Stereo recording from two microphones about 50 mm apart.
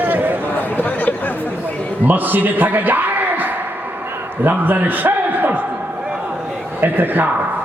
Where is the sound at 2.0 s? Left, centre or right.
Right.